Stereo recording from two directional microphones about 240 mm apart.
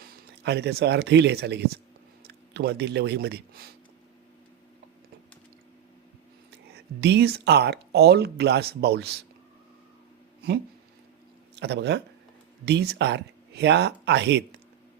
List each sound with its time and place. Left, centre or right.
0.0 s speech: right
6.7 s speech: right
11.5 s speech: right